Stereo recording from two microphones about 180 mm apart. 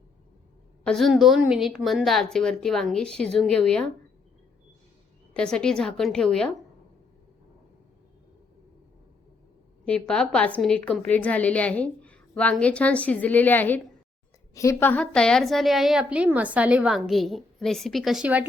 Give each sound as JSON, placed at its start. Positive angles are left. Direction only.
{"t": 0.9, "sound": "a woman's voice", "side_deg": 0}
{"t": 5.3, "sound": "a woman's voice", "side_deg": 5}
{"t": 9.8, "sound": "a woman's voice", "side_deg": 5}